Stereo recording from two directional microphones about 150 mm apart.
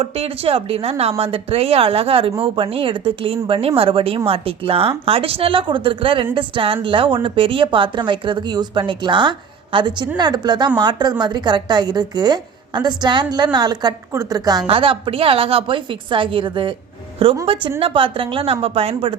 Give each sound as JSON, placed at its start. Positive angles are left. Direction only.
{"t": 0.0, "sound": "a woman's voice", "side_deg": -40}
{"t": 14.7, "sound": "speech", "side_deg": -35}